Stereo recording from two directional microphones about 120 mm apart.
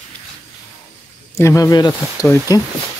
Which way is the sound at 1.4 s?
25° left (ahead or behind).